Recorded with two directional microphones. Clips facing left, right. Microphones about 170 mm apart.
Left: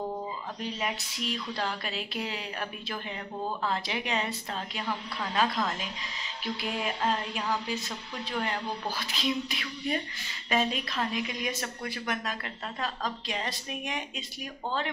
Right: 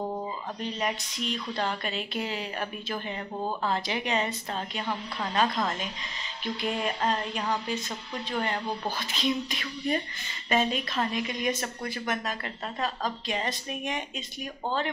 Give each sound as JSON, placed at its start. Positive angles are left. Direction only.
{"t": 0.6, "sound": "a woman's voice", "side_deg": 5}